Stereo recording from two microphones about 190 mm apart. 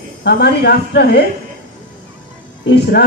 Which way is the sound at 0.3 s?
60° left (ahead or behind).